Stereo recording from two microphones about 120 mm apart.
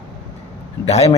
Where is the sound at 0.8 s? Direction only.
60° left (ahead or behind).